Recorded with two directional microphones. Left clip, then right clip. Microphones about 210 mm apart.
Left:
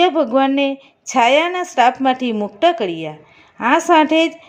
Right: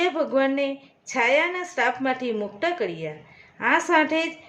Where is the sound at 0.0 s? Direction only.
30° left (ahead or behind).